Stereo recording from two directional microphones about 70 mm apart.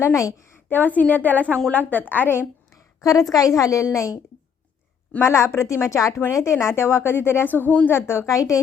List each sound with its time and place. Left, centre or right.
0.0 s a woman's voice: left
0.7 s a woman's voice: left
3.0 s a woman's voice: left
5.2 s a woman's voice: left
7.9 s speech: left